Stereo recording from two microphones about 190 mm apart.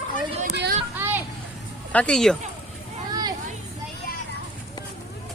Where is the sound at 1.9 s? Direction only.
5° left (ahead or behind).